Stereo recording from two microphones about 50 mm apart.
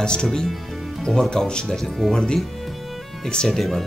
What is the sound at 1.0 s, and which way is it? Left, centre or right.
Speech, centre.